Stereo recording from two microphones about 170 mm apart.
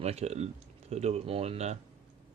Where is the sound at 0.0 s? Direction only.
40° right (ahead or behind).